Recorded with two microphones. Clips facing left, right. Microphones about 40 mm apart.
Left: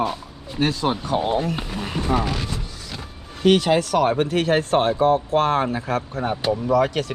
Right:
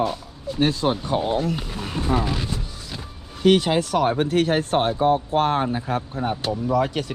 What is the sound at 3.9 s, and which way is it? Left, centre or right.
Speech, left.